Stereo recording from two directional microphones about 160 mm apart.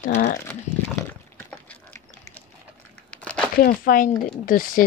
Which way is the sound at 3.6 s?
65° left (ahead or behind).